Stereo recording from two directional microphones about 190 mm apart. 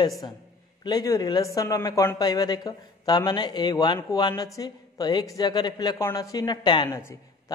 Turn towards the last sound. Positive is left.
turn(degrees=20)  # may be behind; listen again after turning